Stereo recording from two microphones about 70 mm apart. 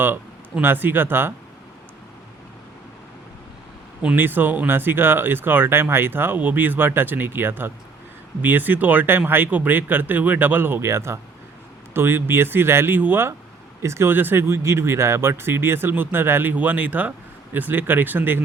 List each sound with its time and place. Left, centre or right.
0.6 s speech: right
4.1 s speech: right